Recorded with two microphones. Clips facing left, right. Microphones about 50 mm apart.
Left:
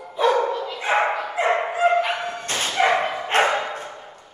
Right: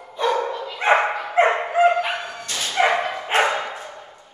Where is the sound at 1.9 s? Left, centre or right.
Centre.